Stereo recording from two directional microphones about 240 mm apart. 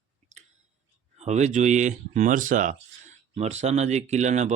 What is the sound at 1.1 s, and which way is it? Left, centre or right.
Speech, right.